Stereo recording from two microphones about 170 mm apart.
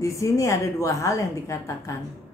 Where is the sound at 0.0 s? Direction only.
15° left (ahead or behind).